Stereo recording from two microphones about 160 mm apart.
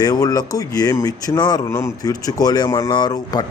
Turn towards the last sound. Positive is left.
turn(degrees=25)  # may be behind; listen again after turning